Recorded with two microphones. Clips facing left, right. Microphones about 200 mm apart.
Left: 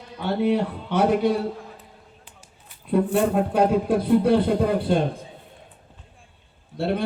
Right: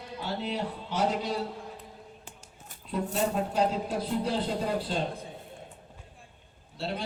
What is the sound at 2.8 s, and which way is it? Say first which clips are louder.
A man's voice: left 9 dB; 60° left (ahead or behind).